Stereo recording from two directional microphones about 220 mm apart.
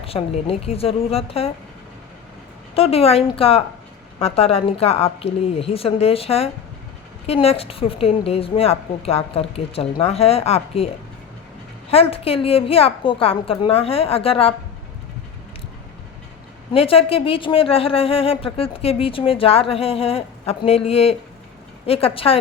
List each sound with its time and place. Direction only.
0.0 s a woman's voice: 25° left (ahead or behind)
2.7 s a woman's voice: 25° left (ahead or behind)
11.9 s a woman's voice: 25° left (ahead or behind)
16.7 s a woman's voice: 25° left (ahead or behind)